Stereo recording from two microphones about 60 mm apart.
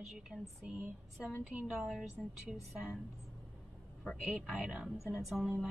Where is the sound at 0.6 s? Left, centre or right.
Right.